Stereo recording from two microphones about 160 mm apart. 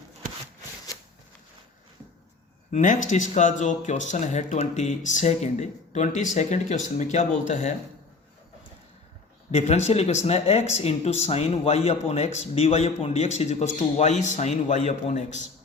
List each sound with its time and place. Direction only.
2.7 s speech: 55° left (ahead or behind)
9.5 s speech: 45° left (ahead or behind)